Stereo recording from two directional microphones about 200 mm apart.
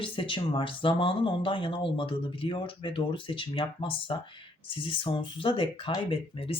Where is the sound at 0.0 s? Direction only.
25° left (ahead or behind).